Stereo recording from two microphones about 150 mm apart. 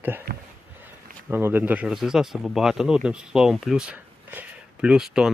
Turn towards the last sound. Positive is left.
turn(degrees=-5)  # may be behind; listen again after turning